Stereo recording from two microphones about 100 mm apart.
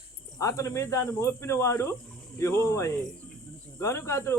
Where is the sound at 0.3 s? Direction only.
30° left (ahead or behind).